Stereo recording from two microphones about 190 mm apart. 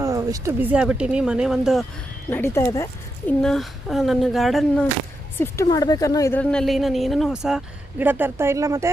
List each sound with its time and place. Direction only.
0.0 s speech: 15° right (ahead or behind)
2.3 s speech: 15° left (ahead or behind)
3.4 s a woman's voice: centre (ahead or behind)
5.6 s speech: 20° left (ahead or behind)
6.4 s a woman's voice: 5° left (ahead or behind); by 8.9 s 15° right (ahead or behind)